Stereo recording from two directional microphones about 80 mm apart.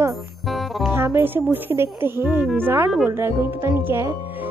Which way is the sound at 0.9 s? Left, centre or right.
Right.